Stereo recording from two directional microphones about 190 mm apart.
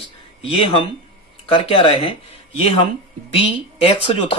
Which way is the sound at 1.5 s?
30° left (ahead or behind).